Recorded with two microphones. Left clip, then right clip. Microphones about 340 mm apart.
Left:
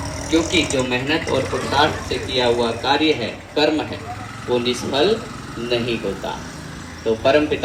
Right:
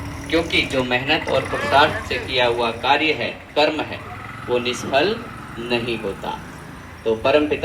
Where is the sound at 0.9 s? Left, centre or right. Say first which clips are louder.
Right 1 dB; centre.